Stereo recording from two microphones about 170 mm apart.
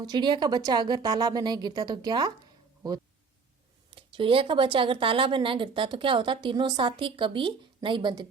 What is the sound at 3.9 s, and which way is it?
Speech, 30° right (ahead or behind).